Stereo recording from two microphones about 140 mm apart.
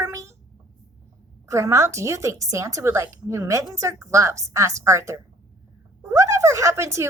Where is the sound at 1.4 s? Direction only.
20° right (ahead or behind).